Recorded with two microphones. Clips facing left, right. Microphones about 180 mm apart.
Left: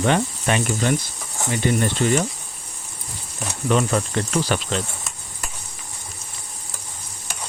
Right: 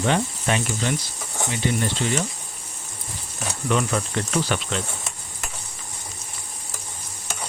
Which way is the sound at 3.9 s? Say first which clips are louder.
Left 3 dB; 40° left (ahead or behind).